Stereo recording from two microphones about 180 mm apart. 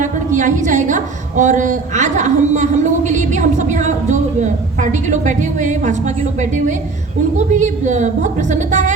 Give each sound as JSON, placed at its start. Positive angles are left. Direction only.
{"t": 0.0, "sound": "a woman's voice", "side_deg": -45}
{"t": 7.3, "sound": "a woman's voice", "side_deg": -40}